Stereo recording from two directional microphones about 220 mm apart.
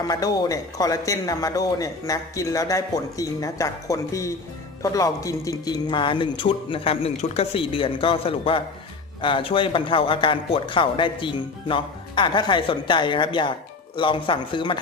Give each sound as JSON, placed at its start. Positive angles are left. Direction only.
{"t": 0.1, "sound": "a man's voice", "side_deg": 15}